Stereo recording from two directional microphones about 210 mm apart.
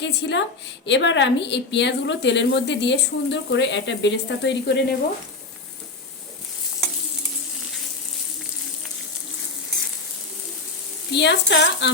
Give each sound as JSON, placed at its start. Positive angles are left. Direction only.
{"t": 0.0, "sound": "a woman's voice", "side_deg": 55}
{"t": 11.1, "sound": "a woman's voice", "side_deg": 55}